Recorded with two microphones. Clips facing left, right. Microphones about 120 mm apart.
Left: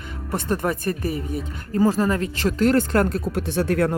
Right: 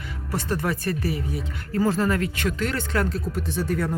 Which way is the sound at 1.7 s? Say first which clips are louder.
Left 3 dB; 15° left (ahead or behind).